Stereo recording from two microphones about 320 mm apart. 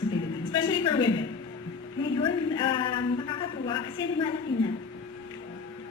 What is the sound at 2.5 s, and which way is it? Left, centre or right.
A woman's voice, centre.